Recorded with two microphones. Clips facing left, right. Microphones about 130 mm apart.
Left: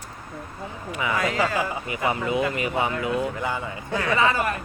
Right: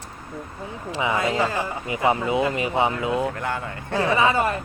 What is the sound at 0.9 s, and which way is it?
Speech, 25° right (ahead or behind).